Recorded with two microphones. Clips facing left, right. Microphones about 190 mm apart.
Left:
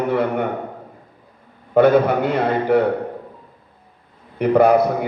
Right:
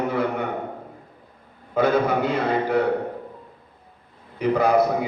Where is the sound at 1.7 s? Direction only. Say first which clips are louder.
Left 6 dB; 60° left (ahead or behind).